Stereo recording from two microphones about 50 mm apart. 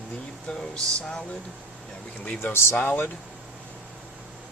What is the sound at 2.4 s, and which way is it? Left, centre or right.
Speech, left.